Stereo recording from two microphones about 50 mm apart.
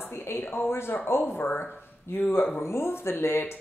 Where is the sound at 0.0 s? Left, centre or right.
Left.